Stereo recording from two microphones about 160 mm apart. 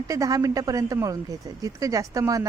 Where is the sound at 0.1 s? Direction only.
20° right (ahead or behind).